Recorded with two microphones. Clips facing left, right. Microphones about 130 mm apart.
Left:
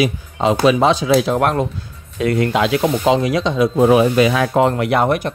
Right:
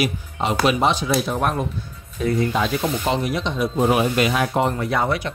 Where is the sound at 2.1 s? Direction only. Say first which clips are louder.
Left 4 dB; 75° left (ahead or behind).